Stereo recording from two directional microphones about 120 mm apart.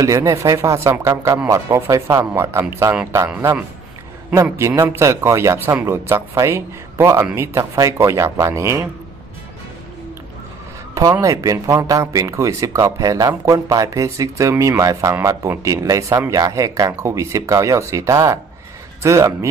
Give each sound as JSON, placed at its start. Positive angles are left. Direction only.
{"t": 0.0, "sound": "speech", "side_deg": -25}
{"t": 4.3, "sound": "speech", "side_deg": -25}
{"t": 11.0, "sound": "speech", "side_deg": -30}